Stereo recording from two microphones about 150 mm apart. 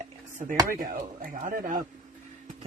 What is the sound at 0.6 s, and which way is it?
Speech, 70° right (ahead or behind).